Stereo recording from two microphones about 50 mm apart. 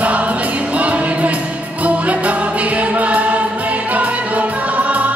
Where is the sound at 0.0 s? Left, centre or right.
Right.